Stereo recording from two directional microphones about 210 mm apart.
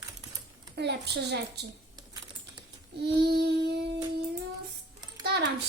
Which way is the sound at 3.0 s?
50° right (ahead or behind).